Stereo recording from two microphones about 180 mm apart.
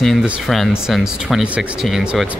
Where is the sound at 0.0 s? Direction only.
Centre (ahead or behind).